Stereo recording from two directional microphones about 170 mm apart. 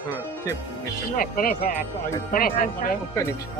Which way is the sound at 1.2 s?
55° left (ahead or behind).